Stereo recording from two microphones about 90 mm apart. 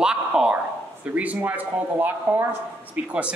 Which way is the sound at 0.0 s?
10° right (ahead or behind).